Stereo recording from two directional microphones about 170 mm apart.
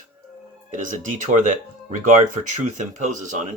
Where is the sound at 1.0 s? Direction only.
50° right (ahead or behind).